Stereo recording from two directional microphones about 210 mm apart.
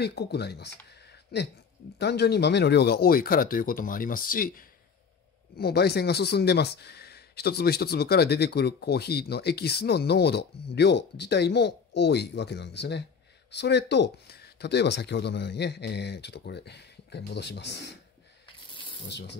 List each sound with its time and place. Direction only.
0.0 s speech: 50° left (ahead or behind)
0.8 s a sound: 55° left (ahead or behind)
2.0 s speech: 50° left (ahead or behind)
19.0 s speech: 55° left (ahead or behind)